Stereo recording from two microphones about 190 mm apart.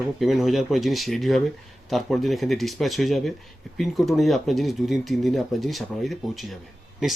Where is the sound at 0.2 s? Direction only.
Centre (ahead or behind).